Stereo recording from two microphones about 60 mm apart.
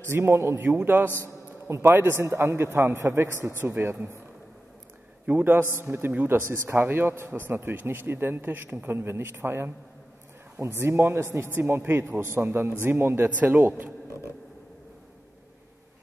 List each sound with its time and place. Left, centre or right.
0.0 s a man's voice: right
1.2 s a sound: right
2.0 s a man's voice: right
5.2 s a man's voice: right
10.8 s a man's voice: right